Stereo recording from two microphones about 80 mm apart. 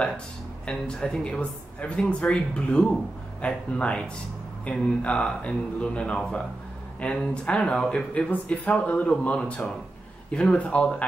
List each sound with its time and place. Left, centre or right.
0.7 s speech: centre